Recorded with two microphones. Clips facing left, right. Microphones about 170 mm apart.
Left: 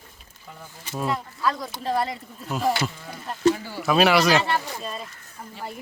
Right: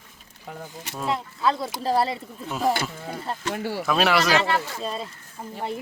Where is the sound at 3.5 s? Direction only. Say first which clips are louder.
Right 2 dB; 75° right (ahead or behind).